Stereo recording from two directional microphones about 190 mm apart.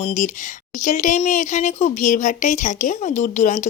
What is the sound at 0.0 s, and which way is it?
A woman's voice, 40° left (ahead or behind).